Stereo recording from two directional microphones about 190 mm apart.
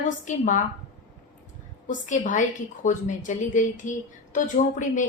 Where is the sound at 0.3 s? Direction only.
45° left (ahead or behind).